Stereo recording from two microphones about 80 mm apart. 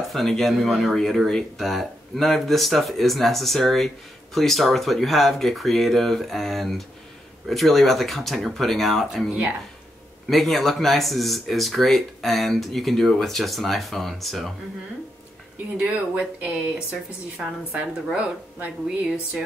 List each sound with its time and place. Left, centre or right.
0.1 s speech: centre
15.8 s a woman's voice: centre
17.7 s a woman's voice: centre